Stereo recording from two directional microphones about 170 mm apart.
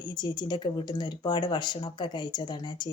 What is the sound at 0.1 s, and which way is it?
A woman's voice, 25° left (ahead or behind).